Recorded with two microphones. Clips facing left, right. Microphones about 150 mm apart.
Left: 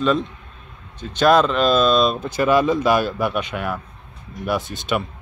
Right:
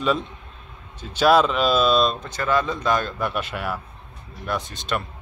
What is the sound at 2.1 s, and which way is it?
Speech, 10° left (ahead or behind).